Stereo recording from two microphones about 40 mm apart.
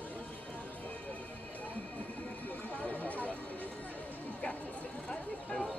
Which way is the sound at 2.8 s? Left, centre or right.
Left.